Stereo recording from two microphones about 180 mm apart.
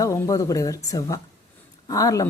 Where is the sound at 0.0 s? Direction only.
15° left (ahead or behind).